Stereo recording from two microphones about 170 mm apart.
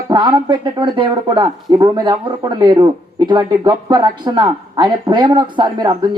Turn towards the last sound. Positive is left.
turn(degrees=-25)  # may be behind; listen again after turning